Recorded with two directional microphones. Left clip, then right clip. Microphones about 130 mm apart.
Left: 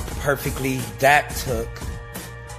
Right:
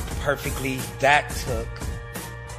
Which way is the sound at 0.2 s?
20° left (ahead or behind).